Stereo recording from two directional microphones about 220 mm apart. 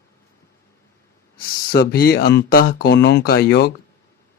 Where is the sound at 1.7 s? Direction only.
45° left (ahead or behind).